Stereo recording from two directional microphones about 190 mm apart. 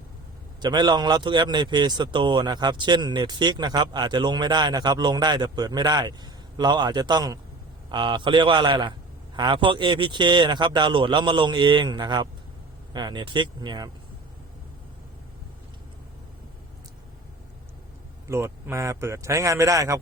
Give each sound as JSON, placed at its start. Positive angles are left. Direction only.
{"t": 0.6, "sound": "speech", "side_deg": -20}
{"t": 18.3, "sound": "speech", "side_deg": -15}